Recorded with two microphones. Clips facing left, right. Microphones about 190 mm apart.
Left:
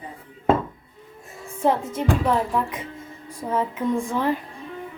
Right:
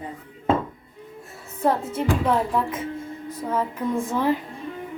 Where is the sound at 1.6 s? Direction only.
5° right (ahead or behind).